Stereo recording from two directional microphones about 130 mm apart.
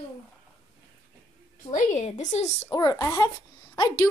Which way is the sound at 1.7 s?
65° left (ahead or behind).